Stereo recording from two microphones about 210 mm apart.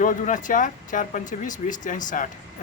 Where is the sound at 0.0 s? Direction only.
40° left (ahead or behind).